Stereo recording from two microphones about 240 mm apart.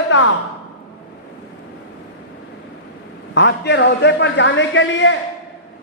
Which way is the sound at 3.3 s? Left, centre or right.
Left.